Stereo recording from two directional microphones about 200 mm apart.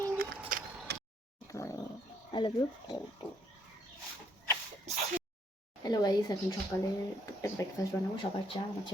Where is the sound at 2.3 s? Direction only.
20° left (ahead or behind).